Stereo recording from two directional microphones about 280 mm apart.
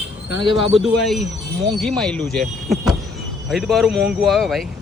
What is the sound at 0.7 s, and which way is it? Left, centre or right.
Speech, centre.